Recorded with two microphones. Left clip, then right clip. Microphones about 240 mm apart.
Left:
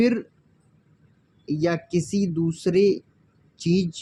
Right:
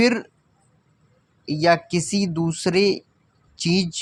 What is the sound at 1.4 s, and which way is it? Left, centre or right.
Speech, right.